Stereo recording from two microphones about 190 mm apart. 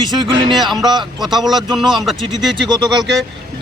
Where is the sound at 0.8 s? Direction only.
25° right (ahead or behind).